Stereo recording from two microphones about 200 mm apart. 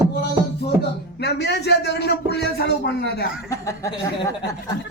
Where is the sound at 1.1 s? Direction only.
55° left (ahead or behind).